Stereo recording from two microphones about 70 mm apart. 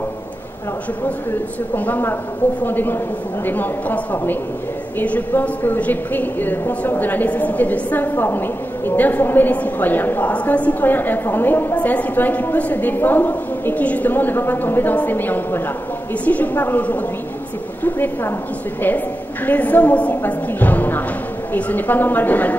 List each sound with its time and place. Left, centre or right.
1.8 s a woman's voice: left